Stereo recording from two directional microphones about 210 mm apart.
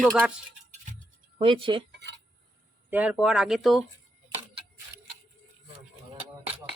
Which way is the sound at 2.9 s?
5° right (ahead or behind).